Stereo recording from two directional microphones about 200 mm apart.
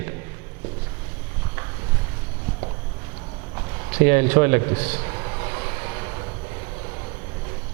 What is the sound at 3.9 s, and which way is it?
A man's voice, 15° right (ahead or behind).